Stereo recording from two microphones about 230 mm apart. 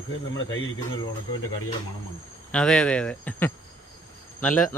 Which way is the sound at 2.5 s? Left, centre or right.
Centre.